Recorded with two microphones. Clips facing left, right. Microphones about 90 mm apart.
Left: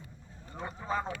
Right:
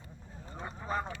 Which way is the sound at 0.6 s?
Centre (ahead or behind).